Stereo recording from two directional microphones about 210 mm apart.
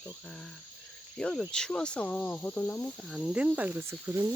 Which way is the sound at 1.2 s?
5° left (ahead or behind).